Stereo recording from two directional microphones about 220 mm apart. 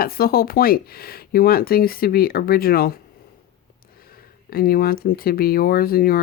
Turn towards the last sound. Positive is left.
turn(degrees=45)  # may be behind; listen again after turning